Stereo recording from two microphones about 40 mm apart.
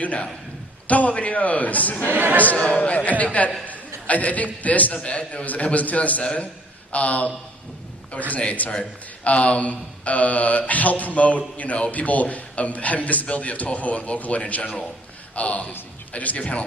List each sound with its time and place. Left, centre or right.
0.0 s a man's voice: left
2.1 s a man's voice: right
2.6 s a man's voice: left
3.7 s a sound: left
4.6 s a man's voice: left
16.4 s speech: left